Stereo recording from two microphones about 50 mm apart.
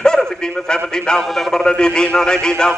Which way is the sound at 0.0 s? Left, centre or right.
Centre.